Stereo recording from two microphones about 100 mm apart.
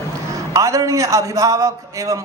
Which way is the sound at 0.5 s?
35° right (ahead or behind).